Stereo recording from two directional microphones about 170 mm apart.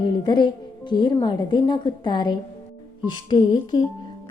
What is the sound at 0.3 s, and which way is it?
A woman's voice, 25° left (ahead or behind).